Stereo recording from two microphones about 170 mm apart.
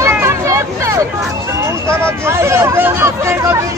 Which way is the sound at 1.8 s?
15° right (ahead or behind).